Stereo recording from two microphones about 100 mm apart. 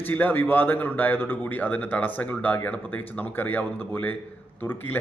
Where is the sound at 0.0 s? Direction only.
20° left (ahead or behind).